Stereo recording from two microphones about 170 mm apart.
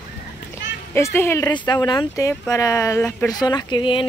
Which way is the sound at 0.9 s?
15° left (ahead or behind).